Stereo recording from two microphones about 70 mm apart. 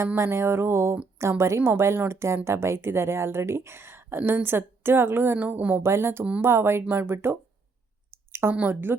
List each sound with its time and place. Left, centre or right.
0.2 s a woman's voice: right
5.8 s a woman's voice: right
8.3 s a sound: right
8.5 s a woman's voice: right